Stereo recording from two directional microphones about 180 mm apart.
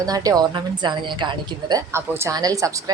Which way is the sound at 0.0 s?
20° right (ahead or behind).